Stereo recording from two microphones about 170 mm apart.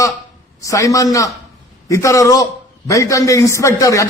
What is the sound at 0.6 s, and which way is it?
A man's voice, 20° left (ahead or behind).